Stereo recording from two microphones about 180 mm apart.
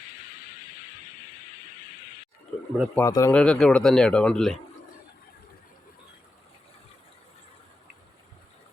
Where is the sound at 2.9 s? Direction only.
15° left (ahead or behind).